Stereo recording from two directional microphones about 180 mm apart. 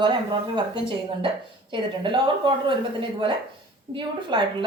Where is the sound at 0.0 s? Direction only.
25° right (ahead or behind).